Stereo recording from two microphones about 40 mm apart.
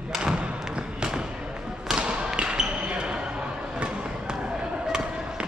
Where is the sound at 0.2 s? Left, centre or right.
Right.